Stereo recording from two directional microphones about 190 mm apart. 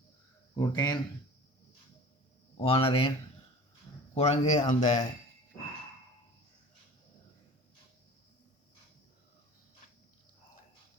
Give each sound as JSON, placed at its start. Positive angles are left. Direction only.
{"t": 0.5, "sound": "speech", "side_deg": 20}
{"t": 2.6, "sound": "speech", "side_deg": 30}
{"t": 4.1, "sound": "speech", "side_deg": 35}